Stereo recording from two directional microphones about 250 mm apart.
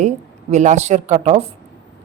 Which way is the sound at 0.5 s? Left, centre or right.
Right.